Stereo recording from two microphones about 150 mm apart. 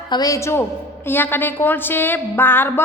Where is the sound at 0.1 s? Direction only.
25° left (ahead or behind).